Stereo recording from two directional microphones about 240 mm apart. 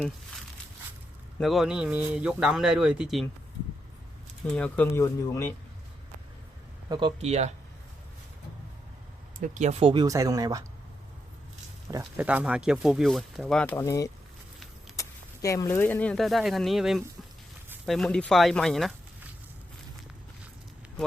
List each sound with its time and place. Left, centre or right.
1.4 s speech: centre
4.4 s speech: centre
6.8 s speech: centre
9.4 s speech: right; by 10.6 s centre
11.9 s speech: centre